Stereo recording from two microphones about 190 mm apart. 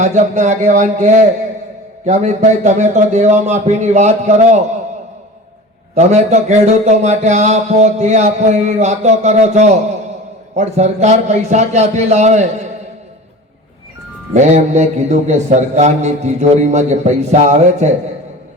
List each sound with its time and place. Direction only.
0.0 s a man's voice: 40° right (ahead or behind)
5.9 s a man's voice: 35° right (ahead or behind)
14.3 s a man's voice: 40° right (ahead or behind)